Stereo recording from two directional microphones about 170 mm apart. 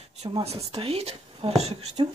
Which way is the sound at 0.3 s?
35° right (ahead or behind).